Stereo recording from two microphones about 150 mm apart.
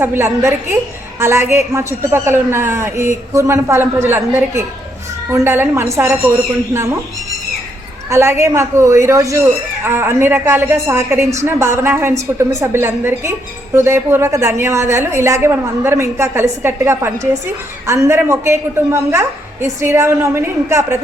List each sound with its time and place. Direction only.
0.0 s a woman's voice: 15° right (ahead or behind)
8.1 s a woman's voice: 20° right (ahead or behind)